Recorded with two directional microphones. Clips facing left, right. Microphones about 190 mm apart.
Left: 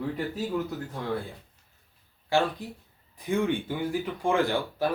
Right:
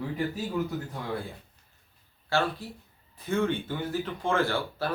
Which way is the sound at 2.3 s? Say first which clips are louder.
Left 2 dB; 15° left (ahead or behind).